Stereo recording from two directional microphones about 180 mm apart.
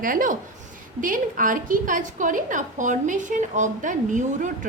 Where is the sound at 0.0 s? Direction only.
50° right (ahead or behind).